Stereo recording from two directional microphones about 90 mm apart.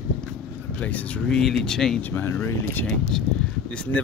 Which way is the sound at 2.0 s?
20° left (ahead or behind).